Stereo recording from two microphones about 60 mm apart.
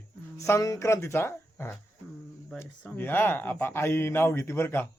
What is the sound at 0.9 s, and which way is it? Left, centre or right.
Speech, left.